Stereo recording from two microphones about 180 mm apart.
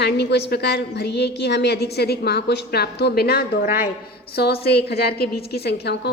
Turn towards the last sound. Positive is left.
turn(degrees=65)  # may be behind; listen again after turning